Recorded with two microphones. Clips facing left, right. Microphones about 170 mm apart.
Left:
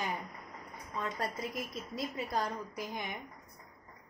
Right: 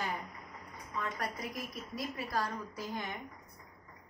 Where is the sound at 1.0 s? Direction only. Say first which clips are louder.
Left 2 dB; 25° left (ahead or behind).